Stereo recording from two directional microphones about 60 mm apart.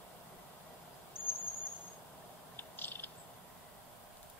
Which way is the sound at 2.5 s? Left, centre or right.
Left.